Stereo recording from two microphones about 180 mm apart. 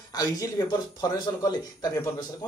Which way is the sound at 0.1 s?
20° left (ahead or behind).